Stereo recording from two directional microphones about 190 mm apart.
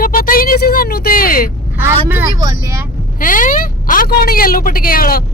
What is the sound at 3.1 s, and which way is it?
Speech, 45° left (ahead or behind).